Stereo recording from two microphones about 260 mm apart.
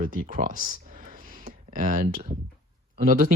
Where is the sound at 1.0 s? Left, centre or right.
Right.